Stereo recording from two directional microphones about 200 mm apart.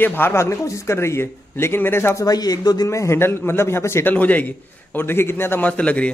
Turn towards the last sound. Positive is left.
turn(degrees=5)  # may be behind; listen again after turning